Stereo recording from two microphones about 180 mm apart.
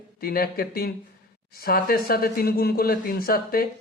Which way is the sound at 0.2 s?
55° left (ahead or behind).